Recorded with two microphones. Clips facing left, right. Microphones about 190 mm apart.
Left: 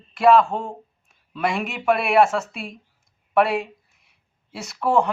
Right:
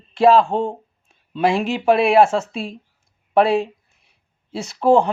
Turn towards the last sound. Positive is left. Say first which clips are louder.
# right 5 dB
turn(degrees=-30)  # may be behind; listen again after turning